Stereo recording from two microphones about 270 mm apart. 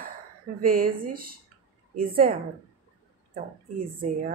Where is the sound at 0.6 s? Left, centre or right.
Right.